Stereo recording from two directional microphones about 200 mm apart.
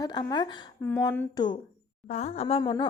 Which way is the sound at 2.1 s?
35° left (ahead or behind).